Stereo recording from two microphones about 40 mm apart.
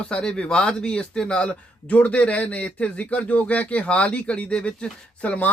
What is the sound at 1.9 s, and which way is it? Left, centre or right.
Speech, left.